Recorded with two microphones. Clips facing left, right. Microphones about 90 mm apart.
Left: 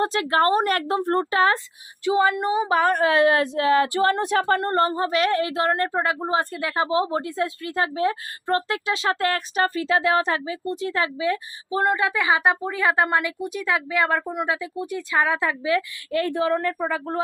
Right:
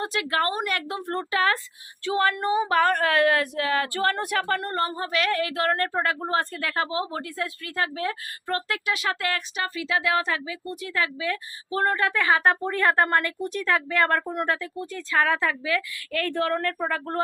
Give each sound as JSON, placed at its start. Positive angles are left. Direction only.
{"t": 0.0, "sound": "a woman's voice", "side_deg": 35}
{"t": 2.0, "sound": "speech", "side_deg": 15}